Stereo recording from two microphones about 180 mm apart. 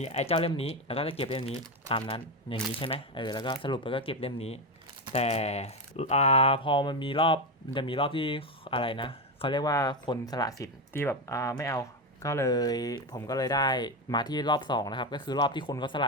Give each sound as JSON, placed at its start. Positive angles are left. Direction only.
{"t": 0.0, "sound": "speech", "side_deg": 35}